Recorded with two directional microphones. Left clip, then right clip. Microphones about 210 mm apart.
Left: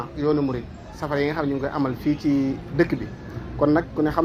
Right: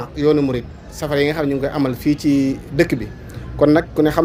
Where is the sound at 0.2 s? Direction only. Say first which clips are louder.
Right 7 dB; 55° right (ahead or behind).